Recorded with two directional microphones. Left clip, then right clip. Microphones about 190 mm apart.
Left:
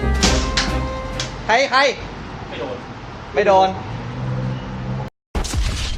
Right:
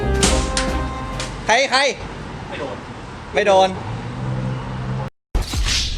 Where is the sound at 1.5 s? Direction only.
50° right (ahead or behind).